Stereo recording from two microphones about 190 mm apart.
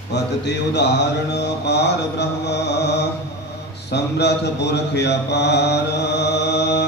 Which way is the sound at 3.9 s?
60° left (ahead or behind).